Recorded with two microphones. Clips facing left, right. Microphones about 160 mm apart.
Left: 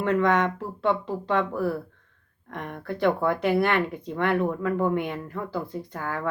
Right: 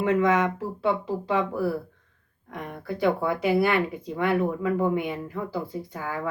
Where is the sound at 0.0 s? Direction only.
10° right (ahead or behind).